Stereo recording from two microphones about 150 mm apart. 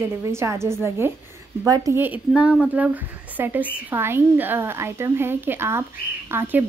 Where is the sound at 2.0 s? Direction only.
10° right (ahead or behind).